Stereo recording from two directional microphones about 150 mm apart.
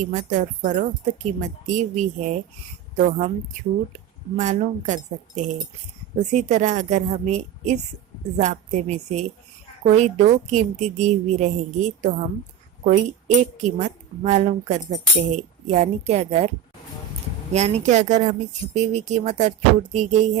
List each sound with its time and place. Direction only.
0.0 s speech: 55° right (ahead or behind)
4.4 s speech: 50° right (ahead or behind)
17.5 s speech: 50° right (ahead or behind)